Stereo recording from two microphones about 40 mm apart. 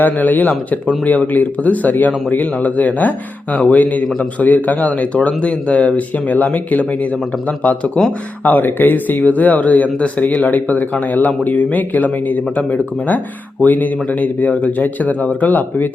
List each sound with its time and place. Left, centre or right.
0.0 s speech: left